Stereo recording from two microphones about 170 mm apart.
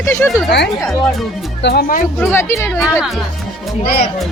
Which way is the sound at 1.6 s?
70° left (ahead or behind).